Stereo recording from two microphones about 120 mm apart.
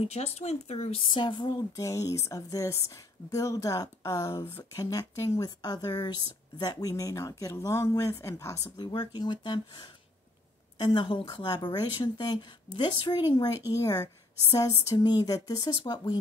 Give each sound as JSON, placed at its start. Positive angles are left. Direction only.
{"t": 0.0, "sound": "speech", "side_deg": 60}
{"t": 1.1, "sound": "a woman's voice", "side_deg": 40}
{"t": 8.7, "sound": "a woman's voice", "side_deg": 35}